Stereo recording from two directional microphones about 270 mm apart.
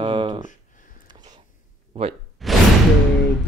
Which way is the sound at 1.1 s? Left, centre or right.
Centre.